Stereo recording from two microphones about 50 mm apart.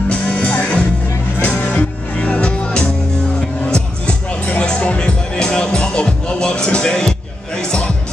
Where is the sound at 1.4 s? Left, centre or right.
Left.